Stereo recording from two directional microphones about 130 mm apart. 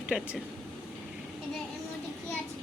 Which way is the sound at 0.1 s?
5° right (ahead or behind).